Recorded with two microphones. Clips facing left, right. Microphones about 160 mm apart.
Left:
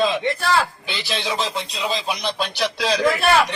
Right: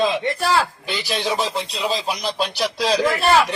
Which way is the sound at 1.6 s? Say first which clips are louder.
Right 2 dB; 30° right (ahead or behind).